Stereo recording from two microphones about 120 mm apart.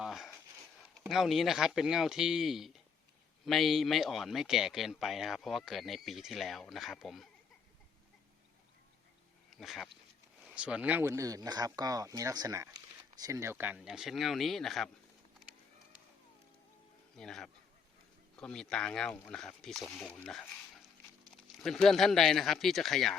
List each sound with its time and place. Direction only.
0.0 s a sound: centre (ahead or behind)
1.0 s speech: centre (ahead or behind)
9.5 s speech: centre (ahead or behind)
11.1 s speech: 30° right (ahead or behind)
13.7 s speech: 5° right (ahead or behind)
17.2 s speech: 5° left (ahead or behind)